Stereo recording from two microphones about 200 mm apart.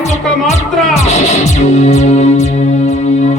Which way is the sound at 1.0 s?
35° left (ahead or behind).